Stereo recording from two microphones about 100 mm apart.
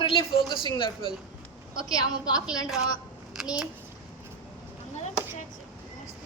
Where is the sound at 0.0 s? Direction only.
65° left (ahead or behind).